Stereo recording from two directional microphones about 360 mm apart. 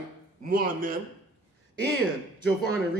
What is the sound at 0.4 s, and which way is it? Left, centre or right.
Speech, right.